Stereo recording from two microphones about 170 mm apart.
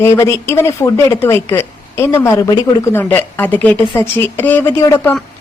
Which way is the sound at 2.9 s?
10° left (ahead or behind).